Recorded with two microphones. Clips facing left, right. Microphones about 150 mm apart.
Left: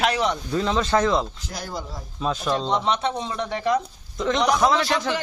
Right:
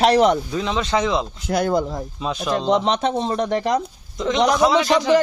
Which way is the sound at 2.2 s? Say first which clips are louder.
Left 1 dB; 10° right (ahead or behind).